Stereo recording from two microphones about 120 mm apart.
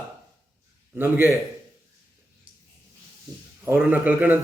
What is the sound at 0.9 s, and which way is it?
Speech, 15° right (ahead or behind).